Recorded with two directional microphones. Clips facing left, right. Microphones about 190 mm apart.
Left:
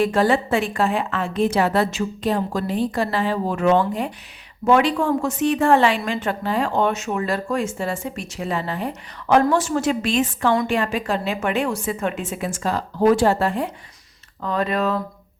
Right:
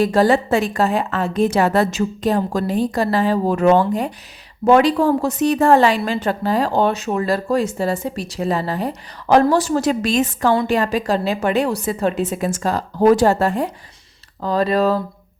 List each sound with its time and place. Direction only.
0.0 s a woman's voice: 40° right (ahead or behind)